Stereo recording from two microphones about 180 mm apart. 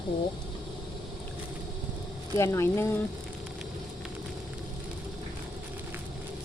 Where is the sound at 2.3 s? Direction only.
15° left (ahead or behind).